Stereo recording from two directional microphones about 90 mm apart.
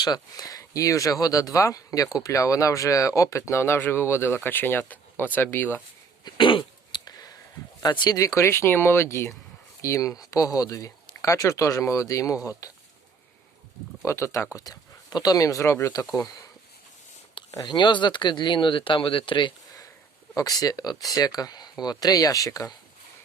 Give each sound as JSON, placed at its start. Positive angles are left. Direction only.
{"t": 0.0, "sound": "speech", "side_deg": 45}
{"t": 6.2, "sound": "cough", "side_deg": 60}
{"t": 7.8, "sound": "speech", "side_deg": 50}
{"t": 8.2, "sound": "speech", "side_deg": 35}
{"t": 14.0, "sound": "speech", "side_deg": 35}
{"t": 17.7, "sound": "speech", "side_deg": 60}
{"t": 20.3, "sound": "speech", "side_deg": 45}